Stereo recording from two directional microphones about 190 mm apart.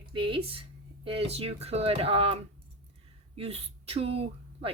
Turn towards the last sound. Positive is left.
turn(degrees=-30)  # may be behind; listen again after turning